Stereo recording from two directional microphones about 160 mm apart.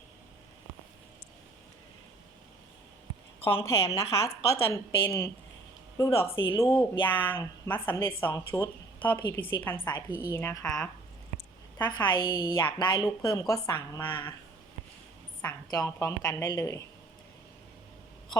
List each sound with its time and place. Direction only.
3.4 s a woman's voice: 15° left (ahead or behind)
11.9 s a woman's voice: 25° left (ahead or behind)
15.4 s a woman's voice: 20° left (ahead or behind)